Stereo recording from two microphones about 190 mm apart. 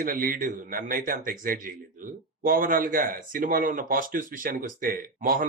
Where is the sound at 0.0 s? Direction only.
45° right (ahead or behind).